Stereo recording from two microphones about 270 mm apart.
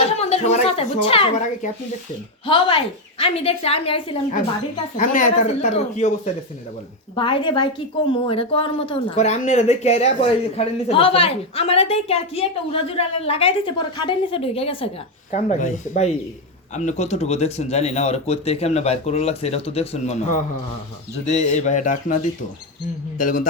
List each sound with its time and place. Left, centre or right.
0.2 s speech: left
7.2 s speech: centre